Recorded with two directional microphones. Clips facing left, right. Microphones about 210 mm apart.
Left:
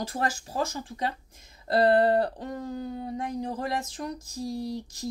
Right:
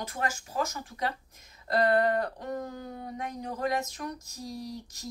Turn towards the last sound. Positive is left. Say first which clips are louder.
# left 6 dB
turn(degrees=30)  # may be behind; listen again after turning